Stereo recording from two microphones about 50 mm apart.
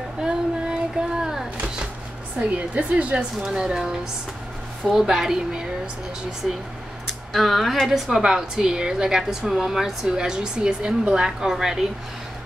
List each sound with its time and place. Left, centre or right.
0.2 s a sound: centre
2.5 s a woman's voice: right
7.3 s speech: centre
8.2 s a woman's voice: centre